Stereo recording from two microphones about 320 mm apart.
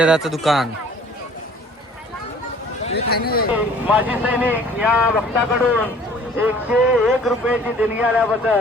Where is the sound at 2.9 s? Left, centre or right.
Left.